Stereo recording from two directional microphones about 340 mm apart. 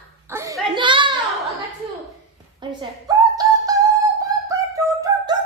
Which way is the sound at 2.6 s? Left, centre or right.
Centre.